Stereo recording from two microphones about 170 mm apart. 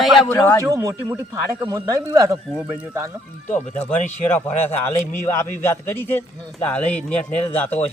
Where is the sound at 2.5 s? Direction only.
10° right (ahead or behind).